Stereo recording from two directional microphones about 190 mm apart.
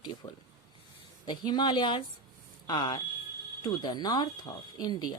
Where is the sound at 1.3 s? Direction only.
25° left (ahead or behind).